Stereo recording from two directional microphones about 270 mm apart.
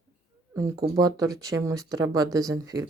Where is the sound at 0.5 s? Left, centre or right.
Centre.